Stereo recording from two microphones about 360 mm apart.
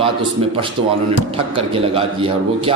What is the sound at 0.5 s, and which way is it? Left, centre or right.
A man's voice, centre.